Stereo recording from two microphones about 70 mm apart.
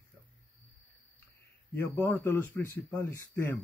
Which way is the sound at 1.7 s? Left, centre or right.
Left.